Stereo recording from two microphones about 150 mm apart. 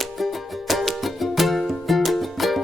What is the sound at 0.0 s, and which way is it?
Music, centre (ahead or behind).